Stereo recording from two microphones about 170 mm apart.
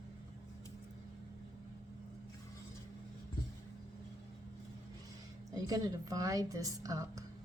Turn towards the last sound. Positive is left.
turn(degrees=-20)  # may be behind; listen again after turning